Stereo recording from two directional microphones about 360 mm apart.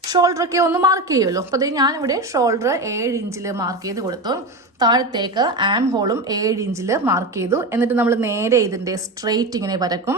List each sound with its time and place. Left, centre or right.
0.1 s a woman's voice: centre